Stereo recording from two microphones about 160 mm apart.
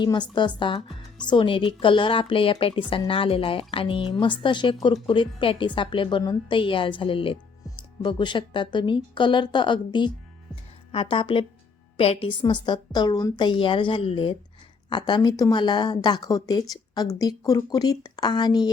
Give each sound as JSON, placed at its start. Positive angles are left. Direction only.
{"t": 0.0, "sound": "speech", "side_deg": 30}
{"t": 10.5, "sound": "music", "side_deg": 35}
{"t": 11.9, "sound": "speech", "side_deg": 35}